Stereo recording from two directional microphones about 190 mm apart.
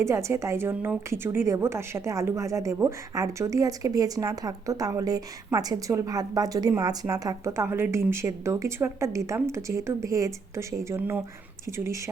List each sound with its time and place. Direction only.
0.0 s a woman's voice: 15° right (ahead or behind)